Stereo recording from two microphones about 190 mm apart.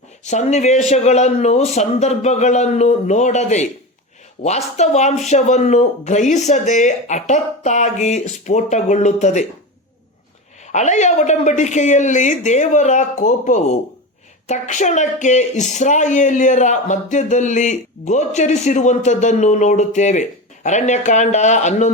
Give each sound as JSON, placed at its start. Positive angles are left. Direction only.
{"t": 0.3, "sound": "speech", "side_deg": 35}
{"t": 10.7, "sound": "speech", "side_deg": 40}